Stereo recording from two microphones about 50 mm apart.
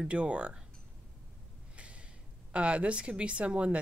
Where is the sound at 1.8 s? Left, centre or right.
Right.